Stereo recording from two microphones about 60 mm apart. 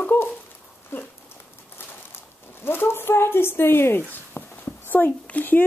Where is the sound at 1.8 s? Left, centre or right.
Left.